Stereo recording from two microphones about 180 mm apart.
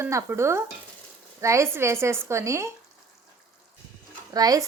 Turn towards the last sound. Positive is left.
turn(degrees=-20)  # may be behind; listen again after turning